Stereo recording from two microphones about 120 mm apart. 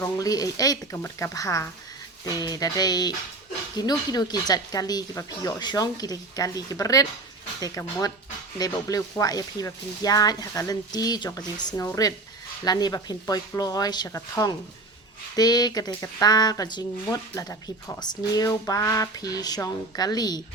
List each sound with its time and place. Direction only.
0.0 s speech: 30° left (ahead or behind)
8.5 s speech: 30° left (ahead or behind)